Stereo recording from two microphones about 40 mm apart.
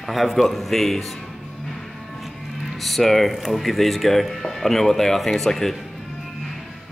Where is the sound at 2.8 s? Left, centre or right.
Centre.